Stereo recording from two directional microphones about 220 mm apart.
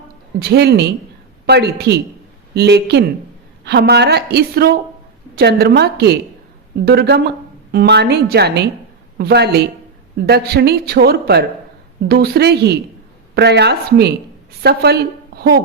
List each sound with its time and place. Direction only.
0.4 s a woman's voice: 50° right (ahead or behind)